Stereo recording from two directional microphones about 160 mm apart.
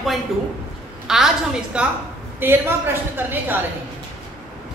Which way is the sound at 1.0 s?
Centre (ahead or behind).